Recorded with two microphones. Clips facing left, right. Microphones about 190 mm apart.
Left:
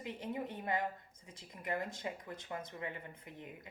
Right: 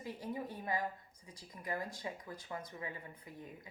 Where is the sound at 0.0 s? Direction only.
20° left (ahead or behind).